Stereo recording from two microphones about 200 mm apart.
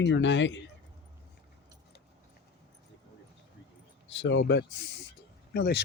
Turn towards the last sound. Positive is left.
turn(degrees=55)  # may be behind; listen again after turning